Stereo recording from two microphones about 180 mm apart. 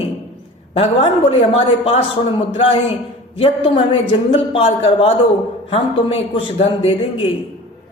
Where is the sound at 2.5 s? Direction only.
30° left (ahead or behind).